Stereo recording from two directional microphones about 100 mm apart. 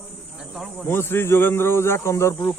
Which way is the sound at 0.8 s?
25° left (ahead or behind).